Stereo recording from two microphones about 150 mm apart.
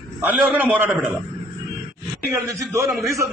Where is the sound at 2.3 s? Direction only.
20° right (ahead or behind).